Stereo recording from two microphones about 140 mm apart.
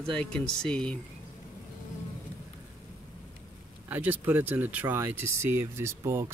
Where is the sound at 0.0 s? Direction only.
5° left (ahead or behind).